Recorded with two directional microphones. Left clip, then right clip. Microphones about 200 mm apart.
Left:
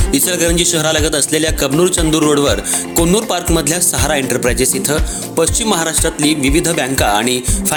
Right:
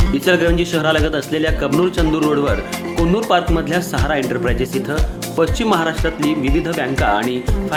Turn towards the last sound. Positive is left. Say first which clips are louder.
# left 4 dB
turn(degrees=35)  # may be behind; listen again after turning